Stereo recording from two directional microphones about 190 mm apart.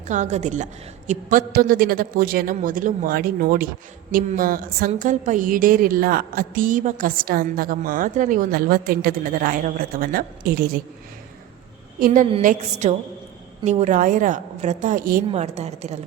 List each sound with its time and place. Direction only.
0.1 s a woman's voice: 40° right (ahead or behind)
11.9 s a woman's voice: 45° right (ahead or behind)
15.3 s a woman's voice: 35° right (ahead or behind)